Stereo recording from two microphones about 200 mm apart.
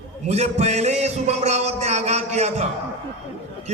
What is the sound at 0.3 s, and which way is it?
A man's voice, 35° right (ahead or behind).